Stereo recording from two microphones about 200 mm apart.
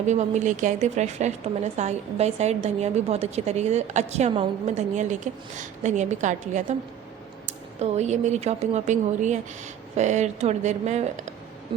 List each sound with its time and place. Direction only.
0.1 s a woman's voice: 35° right (ahead or behind)
7.8 s a woman's voice: 35° right (ahead or behind)